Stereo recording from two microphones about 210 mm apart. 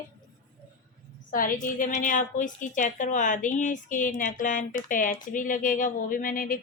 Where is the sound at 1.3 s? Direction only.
40° left (ahead or behind).